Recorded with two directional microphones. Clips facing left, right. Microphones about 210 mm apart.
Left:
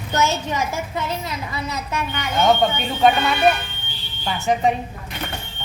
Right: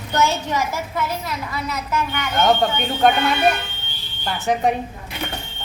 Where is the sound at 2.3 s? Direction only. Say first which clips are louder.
Left 1 dB; centre (ahead or behind).